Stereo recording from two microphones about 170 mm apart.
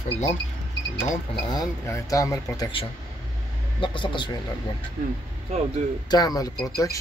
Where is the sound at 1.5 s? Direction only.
20° left (ahead or behind).